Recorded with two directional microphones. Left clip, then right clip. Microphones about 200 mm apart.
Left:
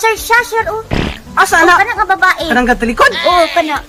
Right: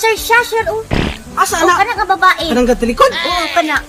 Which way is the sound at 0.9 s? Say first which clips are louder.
Even; centre (ahead or behind).